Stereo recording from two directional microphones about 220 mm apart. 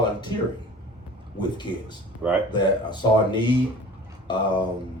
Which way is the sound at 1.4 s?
20° left (ahead or behind).